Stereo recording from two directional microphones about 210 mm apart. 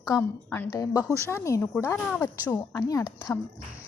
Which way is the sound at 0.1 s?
10° left (ahead or behind).